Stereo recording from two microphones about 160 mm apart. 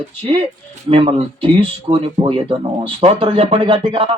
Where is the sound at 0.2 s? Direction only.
35° right (ahead or behind).